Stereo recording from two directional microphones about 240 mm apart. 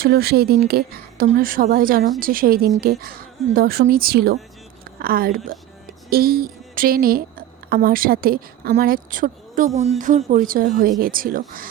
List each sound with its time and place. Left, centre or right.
0.0 s a woman's voice: right